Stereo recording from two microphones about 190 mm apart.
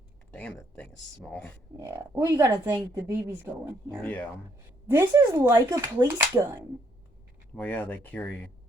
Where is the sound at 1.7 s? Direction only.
15° right (ahead or behind).